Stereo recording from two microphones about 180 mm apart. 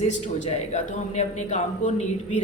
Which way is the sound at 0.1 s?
40° left (ahead or behind).